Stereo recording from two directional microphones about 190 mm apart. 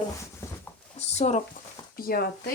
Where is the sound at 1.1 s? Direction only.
35° left (ahead or behind).